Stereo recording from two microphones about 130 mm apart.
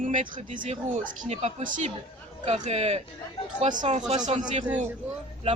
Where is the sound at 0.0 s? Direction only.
75° right (ahead or behind).